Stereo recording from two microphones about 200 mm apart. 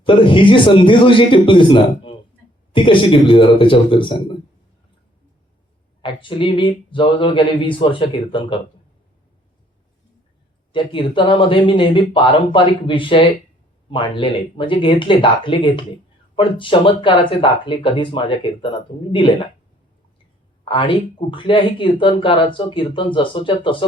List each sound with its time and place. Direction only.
0.0 s speech: 25° left (ahead or behind)
6.0 s speech: 25° left (ahead or behind)
10.7 s speech: 25° left (ahead or behind)
20.7 s speech: 25° left (ahead or behind)